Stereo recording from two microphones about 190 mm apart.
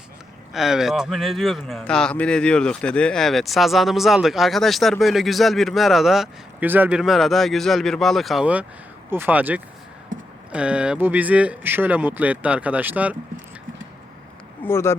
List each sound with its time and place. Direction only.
0.5 s speech: centre (ahead or behind)
10.1 s a sound: 90° right
10.5 s speech: 5° right (ahead or behind)
14.6 s speech: 15° left (ahead or behind)